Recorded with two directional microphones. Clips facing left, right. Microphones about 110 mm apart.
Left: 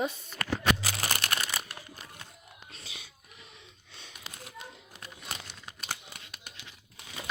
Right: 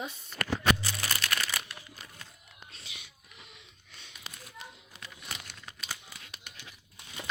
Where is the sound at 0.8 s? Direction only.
90° left.